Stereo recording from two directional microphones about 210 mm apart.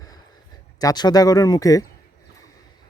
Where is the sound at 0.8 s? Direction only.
20° left (ahead or behind).